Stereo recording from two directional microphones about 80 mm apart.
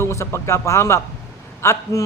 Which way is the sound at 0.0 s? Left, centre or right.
Left.